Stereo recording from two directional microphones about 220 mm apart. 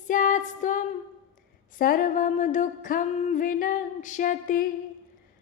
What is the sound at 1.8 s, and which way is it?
Female singing, 40° left (ahead or behind).